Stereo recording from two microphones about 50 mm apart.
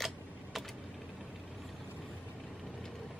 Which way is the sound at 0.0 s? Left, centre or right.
Centre.